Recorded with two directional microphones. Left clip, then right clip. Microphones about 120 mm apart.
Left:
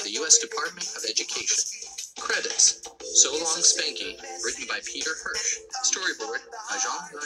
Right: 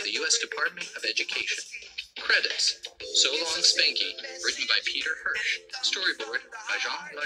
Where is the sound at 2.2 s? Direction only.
30° left (ahead or behind).